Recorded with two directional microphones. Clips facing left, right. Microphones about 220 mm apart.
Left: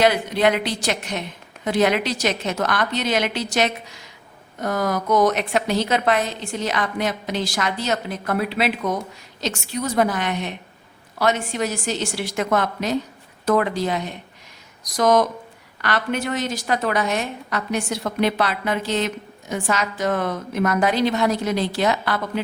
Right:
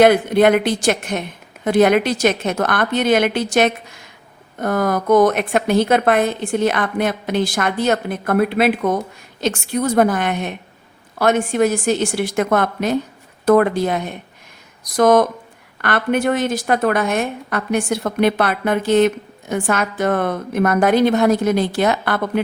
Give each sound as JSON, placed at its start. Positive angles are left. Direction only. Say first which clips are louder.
{"t": 0.0, "sound": "a woman's voice", "louder": "right 6 dB", "side_deg": -55}